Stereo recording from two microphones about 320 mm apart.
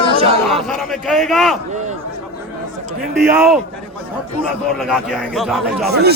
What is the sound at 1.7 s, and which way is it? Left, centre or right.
Speech, right.